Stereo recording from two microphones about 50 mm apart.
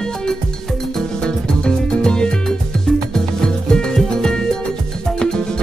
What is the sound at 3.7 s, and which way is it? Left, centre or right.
Music, centre.